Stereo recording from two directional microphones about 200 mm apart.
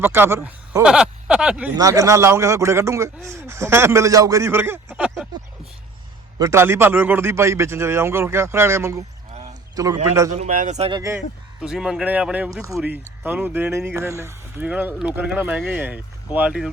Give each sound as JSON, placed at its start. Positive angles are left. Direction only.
{"t": 0.0, "sound": "a man's voice", "side_deg": -10}
{"t": 1.7, "sound": "a man's voice", "side_deg": -15}
{"t": 6.4, "sound": "a man's voice", "side_deg": -15}
{"t": 9.4, "sound": "a sound", "side_deg": -20}
{"t": 10.3, "sound": "speech", "side_deg": -40}
{"t": 10.9, "sound": "a man's voice", "side_deg": -15}
{"t": 11.6, "sound": "a man's voice", "side_deg": 0}